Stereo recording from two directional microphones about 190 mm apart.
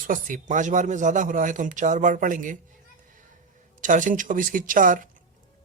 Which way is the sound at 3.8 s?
40° right (ahead or behind).